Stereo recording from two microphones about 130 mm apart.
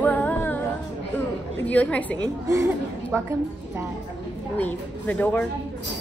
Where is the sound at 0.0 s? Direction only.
15° left (ahead or behind).